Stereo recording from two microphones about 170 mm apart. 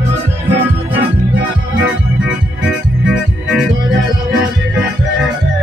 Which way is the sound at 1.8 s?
5° right (ahead or behind).